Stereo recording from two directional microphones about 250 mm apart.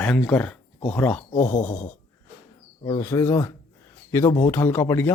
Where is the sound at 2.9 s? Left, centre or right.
Centre.